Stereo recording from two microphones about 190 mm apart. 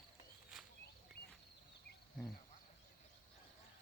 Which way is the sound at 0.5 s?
Centre (ahead or behind).